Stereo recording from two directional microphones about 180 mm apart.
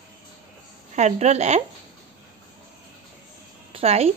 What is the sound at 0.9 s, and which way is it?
Speech, 40° right (ahead or behind).